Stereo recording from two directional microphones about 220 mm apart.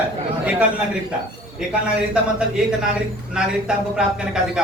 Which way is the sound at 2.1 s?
5° right (ahead or behind).